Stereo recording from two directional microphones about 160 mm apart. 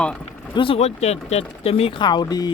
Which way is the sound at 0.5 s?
35° left (ahead or behind).